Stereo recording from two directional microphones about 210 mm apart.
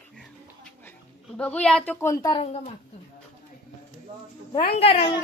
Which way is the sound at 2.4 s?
30° left (ahead or behind).